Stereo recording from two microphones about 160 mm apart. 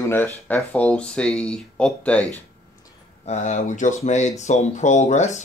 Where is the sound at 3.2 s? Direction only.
45° left (ahead or behind).